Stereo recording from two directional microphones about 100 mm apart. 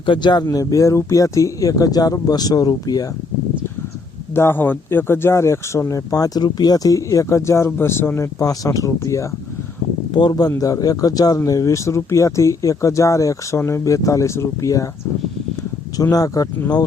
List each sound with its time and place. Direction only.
0.0 s speech: 50° left (ahead or behind)
0.4 s speech: 35° left (ahead or behind)
4.4 s speech: 20° left (ahead or behind)
10.1 s speech: 50° left (ahead or behind); by 14.8 s 35° left (ahead or behind)
16.1 s speech: 40° left (ahead or behind)